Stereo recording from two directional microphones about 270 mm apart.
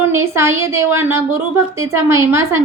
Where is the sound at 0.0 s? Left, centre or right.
Centre.